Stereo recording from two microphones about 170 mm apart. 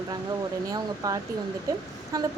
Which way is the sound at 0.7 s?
20° right (ahead or behind).